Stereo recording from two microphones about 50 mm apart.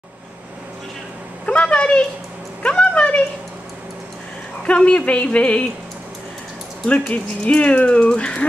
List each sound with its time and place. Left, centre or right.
1.4 s a sound: left
4.6 s speech: left
6.9 s speech: left